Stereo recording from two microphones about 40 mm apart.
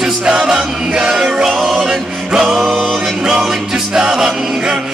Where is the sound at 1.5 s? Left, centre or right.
Centre.